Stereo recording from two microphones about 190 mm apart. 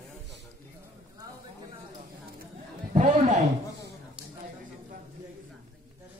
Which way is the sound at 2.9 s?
40° right (ahead or behind).